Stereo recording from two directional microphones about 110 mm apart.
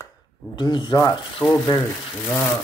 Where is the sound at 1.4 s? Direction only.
15° left (ahead or behind).